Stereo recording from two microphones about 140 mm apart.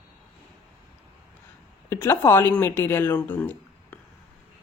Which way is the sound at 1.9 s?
20° left (ahead or behind).